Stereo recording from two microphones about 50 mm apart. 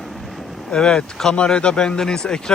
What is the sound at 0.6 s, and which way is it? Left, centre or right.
Speech, centre.